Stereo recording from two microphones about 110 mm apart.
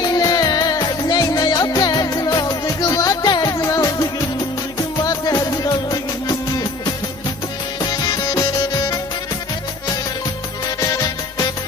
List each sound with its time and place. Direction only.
0.0 s music: 35° left (ahead or behind)
7.8 s music: 35° left (ahead or behind)
10.7 s music: 35° left (ahead or behind)